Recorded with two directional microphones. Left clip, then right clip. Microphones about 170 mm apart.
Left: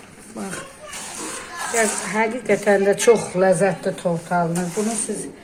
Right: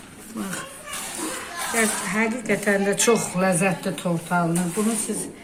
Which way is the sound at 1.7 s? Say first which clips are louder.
Left 3 dB; 50° left (ahead or behind).